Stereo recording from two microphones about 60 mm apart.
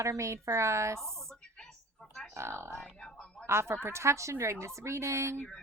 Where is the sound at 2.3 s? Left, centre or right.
Right.